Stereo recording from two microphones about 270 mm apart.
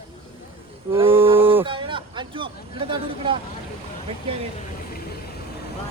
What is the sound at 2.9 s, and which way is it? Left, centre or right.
Speech, centre.